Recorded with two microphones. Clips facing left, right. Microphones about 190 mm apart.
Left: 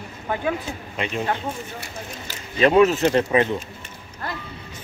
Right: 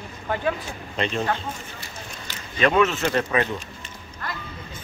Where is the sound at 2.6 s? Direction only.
30° left (ahead or behind).